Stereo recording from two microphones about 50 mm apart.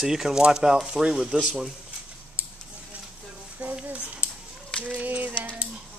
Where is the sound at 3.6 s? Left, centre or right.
Right.